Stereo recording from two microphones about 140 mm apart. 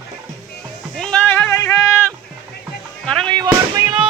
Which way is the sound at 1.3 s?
15° left (ahead or behind).